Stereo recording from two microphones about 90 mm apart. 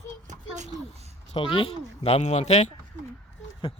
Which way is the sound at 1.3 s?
85° left.